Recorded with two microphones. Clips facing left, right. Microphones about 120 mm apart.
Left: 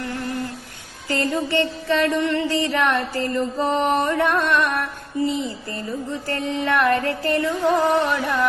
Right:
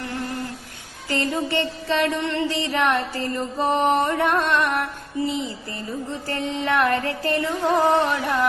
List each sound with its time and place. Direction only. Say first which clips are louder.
1.1 s music: left 2 dB; 20° right (ahead or behind)